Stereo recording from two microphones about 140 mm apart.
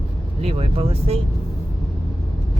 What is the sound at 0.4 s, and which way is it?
Speech, 45° right (ahead or behind).